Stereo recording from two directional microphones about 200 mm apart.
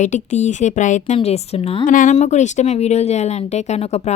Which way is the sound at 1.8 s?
40° left (ahead or behind).